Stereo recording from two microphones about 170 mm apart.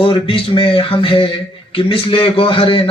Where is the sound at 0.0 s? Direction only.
30° left (ahead or behind).